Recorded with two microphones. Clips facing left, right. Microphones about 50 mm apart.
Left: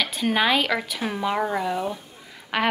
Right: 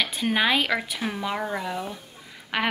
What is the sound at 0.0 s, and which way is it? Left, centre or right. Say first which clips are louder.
Speech: left 1 dB; centre.